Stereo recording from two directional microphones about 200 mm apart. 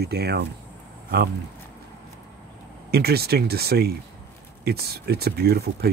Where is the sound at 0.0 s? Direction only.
55° right (ahead or behind).